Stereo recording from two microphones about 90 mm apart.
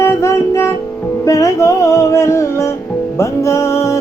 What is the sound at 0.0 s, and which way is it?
Music, 30° left (ahead or behind).